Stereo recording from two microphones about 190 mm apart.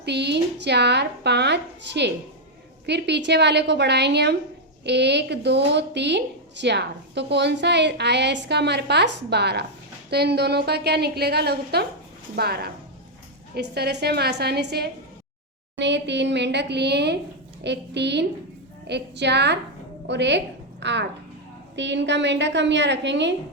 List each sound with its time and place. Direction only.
0.0 s a woman's voice: 60° right (ahead or behind)